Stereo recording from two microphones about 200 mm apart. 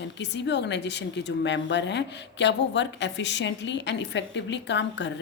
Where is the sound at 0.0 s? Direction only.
60° left (ahead or behind).